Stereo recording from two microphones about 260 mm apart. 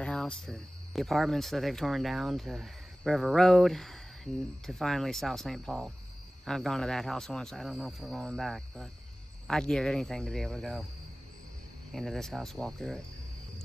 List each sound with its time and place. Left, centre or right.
0.0 s speech: centre
11.9 s speech: centre